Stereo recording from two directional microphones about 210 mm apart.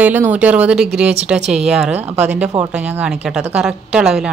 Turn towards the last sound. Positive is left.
turn(degrees=-5)  # may be behind; listen again after turning